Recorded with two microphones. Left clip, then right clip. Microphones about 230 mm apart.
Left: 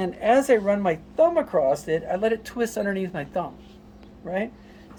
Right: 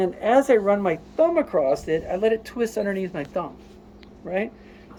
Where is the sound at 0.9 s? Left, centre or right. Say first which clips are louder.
Even; left.